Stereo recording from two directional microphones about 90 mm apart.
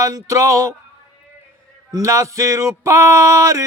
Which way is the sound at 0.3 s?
35° right (ahead or behind).